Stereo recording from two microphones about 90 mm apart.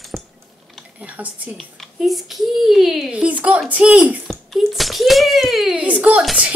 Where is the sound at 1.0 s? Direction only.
15° right (ahead or behind).